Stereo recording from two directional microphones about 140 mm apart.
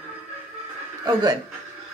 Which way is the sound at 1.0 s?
25° right (ahead or behind).